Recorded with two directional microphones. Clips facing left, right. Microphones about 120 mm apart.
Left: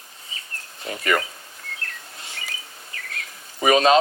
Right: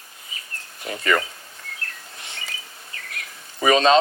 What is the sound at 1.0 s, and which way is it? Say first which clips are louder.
Speech: right 1 dB; 30° right (ahead or behind).